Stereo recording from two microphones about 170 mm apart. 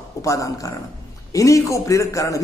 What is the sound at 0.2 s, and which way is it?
A man's voice, 20° left (ahead or behind).